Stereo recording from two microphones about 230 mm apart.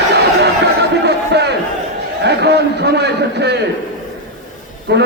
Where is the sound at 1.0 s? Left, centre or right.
Right.